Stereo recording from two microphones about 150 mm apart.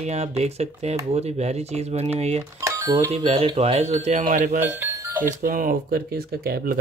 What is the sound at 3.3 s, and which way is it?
Speech, 40° right (ahead or behind).